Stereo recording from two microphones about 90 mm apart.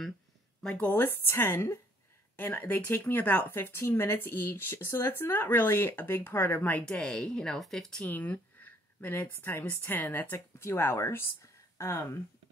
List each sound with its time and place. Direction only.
0.7 s speech: 20° left (ahead or behind)
6.9 s speech: 10° left (ahead or behind)
8.0 s speech: 20° left (ahead or behind)